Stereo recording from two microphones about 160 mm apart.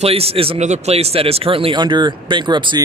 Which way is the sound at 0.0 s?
40° right (ahead or behind).